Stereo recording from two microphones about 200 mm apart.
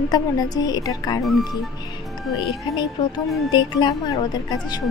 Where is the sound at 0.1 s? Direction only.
20° left (ahead or behind).